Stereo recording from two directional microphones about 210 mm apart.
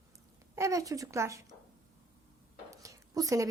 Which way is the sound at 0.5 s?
15° right (ahead or behind).